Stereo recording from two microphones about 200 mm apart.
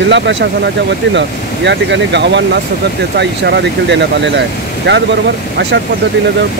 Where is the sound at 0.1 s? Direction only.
65° right (ahead or behind).